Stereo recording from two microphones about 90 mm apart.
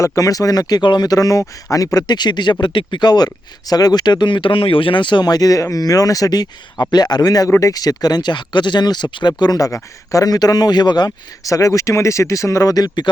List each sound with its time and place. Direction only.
0.0 s speech: 35° left (ahead or behind); by 11.1 s 50° left (ahead or behind)
11.4 s speech: 40° left (ahead or behind)